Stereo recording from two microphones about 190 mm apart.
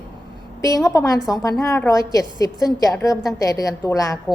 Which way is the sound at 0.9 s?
20° left (ahead or behind).